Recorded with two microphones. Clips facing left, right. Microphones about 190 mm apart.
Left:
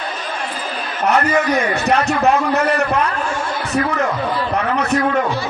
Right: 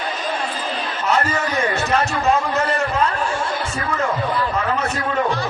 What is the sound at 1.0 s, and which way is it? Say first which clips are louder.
A man's voice: left 5 dB; 60° left (ahead or behind).